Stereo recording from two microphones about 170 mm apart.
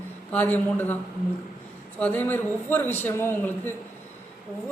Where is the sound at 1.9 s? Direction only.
10° left (ahead or behind).